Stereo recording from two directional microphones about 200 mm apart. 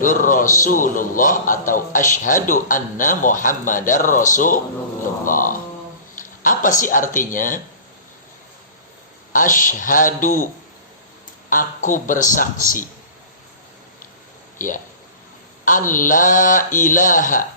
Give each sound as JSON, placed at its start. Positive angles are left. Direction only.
{"t": 0.0, "sound": "a man's voice", "side_deg": 40}
{"t": 9.3, "sound": "a man's voice", "side_deg": 40}
{"t": 15.9, "sound": "a man's voice", "side_deg": 40}